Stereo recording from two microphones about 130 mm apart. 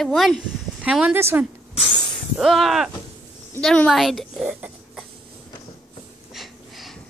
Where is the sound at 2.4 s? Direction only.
Centre (ahead or behind).